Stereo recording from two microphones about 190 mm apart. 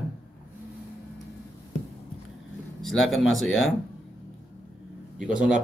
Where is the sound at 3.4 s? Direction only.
90° left.